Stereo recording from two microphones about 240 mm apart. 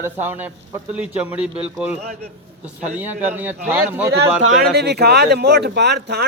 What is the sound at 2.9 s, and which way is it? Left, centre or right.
Speech, centre.